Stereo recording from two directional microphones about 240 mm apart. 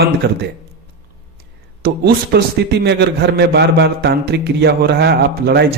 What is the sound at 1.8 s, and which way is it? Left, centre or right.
A man's voice, right.